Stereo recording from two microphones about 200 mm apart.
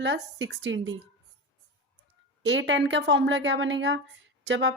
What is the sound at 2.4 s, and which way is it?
A woman's voice, 70° right (ahead or behind).